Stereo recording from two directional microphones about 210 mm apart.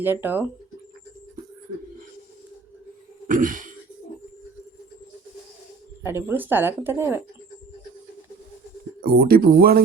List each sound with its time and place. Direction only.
0.0 s speech: 10° right (ahead or behind)
3.2 s a sound: 40° right (ahead or behind)
6.0 s speech: 10° right (ahead or behind)
9.0 s speech: 45° right (ahead or behind)